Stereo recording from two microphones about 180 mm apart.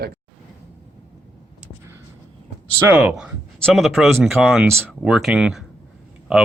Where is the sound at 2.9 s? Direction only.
5° right (ahead or behind).